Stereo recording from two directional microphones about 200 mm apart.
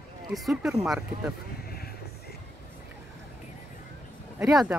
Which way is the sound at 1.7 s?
50° left (ahead or behind).